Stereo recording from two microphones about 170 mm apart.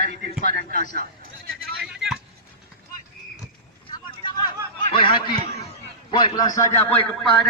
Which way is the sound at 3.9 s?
25° left (ahead or behind).